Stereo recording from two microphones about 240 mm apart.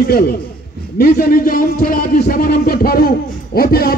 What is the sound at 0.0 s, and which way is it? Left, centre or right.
A man's voice, left.